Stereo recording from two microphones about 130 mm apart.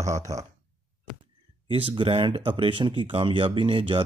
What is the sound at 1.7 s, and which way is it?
A man's voice, 45° right (ahead or behind).